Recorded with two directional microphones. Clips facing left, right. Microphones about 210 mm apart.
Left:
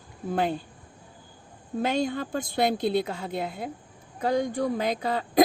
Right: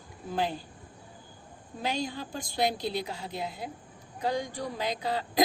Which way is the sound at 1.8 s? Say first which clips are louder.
Left 5 dB; 55° left (ahead or behind).